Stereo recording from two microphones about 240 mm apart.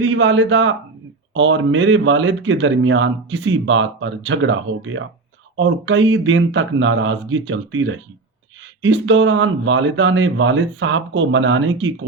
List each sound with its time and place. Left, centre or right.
0.0 s speech: right